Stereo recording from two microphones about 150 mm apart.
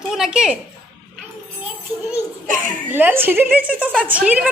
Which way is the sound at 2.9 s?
15° right (ahead or behind).